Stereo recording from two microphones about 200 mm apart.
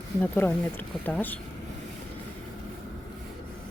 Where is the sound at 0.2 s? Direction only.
10° left (ahead or behind).